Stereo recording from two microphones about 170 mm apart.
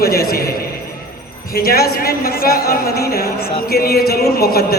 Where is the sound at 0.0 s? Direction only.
65° left (ahead or behind).